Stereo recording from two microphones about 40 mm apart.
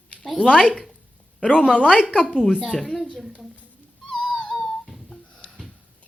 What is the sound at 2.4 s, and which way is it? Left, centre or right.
Speech, centre.